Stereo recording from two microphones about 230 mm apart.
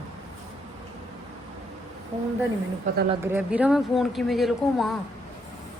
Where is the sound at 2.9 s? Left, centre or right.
Right.